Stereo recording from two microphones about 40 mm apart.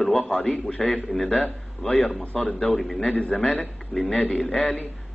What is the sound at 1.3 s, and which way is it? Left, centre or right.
Speech, left.